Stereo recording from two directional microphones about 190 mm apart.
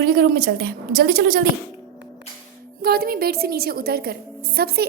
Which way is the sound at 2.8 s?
55° right (ahead or behind).